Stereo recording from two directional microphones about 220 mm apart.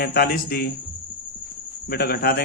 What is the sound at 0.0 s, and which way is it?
Speech, 45° left (ahead or behind).